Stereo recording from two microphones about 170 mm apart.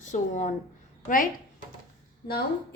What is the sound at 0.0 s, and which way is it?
A woman's voice, 45° left (ahead or behind).